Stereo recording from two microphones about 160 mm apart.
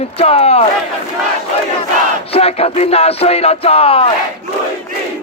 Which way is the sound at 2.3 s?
40° left (ahead or behind).